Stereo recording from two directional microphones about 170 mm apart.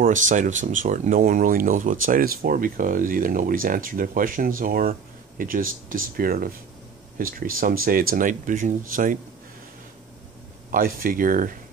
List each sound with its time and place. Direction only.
0.0 s speech: 50° right (ahead or behind)
10.7 s speech: 55° right (ahead or behind)